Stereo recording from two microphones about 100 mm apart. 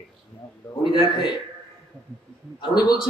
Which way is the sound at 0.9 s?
45° left (ahead or behind).